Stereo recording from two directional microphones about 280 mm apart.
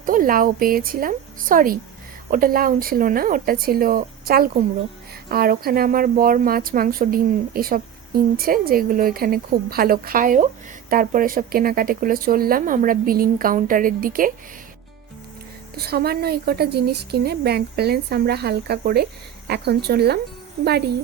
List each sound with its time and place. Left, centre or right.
0.0 s a woman's voice: right
15.7 s a woman's voice: right